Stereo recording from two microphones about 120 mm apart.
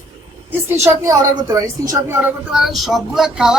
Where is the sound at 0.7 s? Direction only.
20° right (ahead or behind).